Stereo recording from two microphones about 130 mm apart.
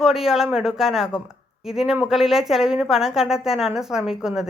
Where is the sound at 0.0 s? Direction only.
5° right (ahead or behind).